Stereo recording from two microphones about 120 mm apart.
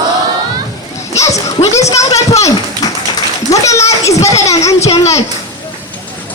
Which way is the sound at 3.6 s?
25° left (ahead or behind).